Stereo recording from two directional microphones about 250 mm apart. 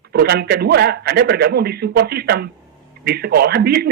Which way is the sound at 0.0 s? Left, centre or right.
Right.